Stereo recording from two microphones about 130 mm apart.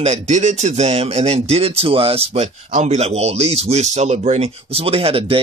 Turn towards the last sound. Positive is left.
turn(degrees=-45)  # may be behind; listen again after turning